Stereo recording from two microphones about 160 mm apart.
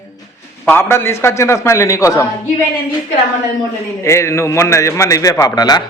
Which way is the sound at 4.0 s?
20° left (ahead or behind).